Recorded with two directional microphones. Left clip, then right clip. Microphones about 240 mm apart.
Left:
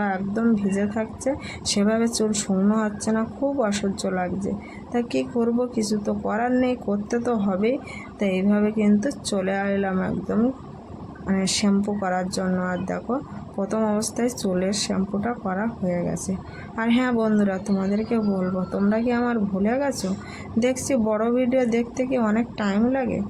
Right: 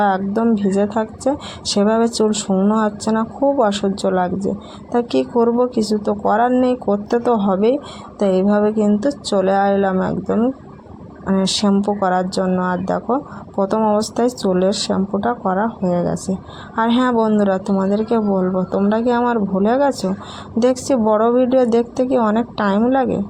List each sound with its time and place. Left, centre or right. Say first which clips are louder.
0.0 s speech: right 8 dB; centre